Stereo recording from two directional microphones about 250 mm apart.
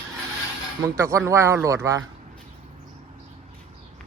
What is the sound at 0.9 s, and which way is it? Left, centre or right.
Speech, centre.